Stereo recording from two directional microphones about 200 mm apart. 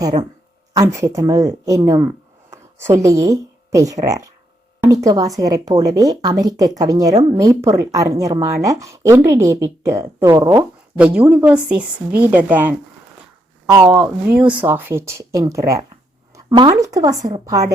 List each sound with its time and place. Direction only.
0.0 s speech: 20° right (ahead or behind)
13.8 s speech: 5° right (ahead or behind)